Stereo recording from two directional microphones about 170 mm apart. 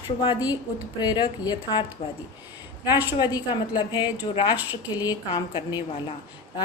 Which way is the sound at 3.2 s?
25° left (ahead or behind).